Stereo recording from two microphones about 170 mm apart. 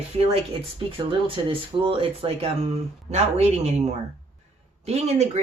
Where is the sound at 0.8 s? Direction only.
30° right (ahead or behind).